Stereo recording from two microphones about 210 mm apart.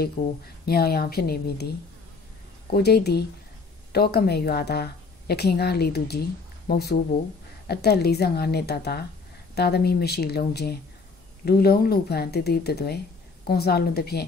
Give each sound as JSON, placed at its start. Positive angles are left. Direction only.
{"t": 0.2, "sound": "speech", "side_deg": 30}
{"t": 0.7, "sound": "a woman's voice", "side_deg": 50}
{"t": 2.7, "sound": "a woman's voice", "side_deg": 50}